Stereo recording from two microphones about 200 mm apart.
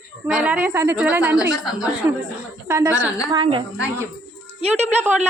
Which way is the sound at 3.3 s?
25° right (ahead or behind).